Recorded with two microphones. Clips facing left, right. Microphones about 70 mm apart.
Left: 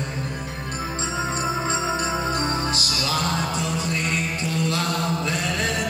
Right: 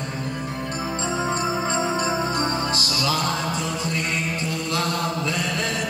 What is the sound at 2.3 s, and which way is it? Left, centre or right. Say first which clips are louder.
Music: right 1 dB; right.